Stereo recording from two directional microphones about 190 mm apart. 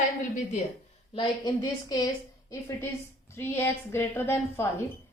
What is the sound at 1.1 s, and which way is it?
Speech, 20° left (ahead or behind).